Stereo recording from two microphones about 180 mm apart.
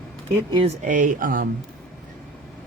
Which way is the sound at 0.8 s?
45° right (ahead or behind).